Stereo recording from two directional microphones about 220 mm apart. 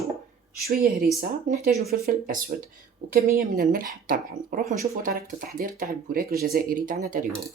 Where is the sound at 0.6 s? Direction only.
40° right (ahead or behind).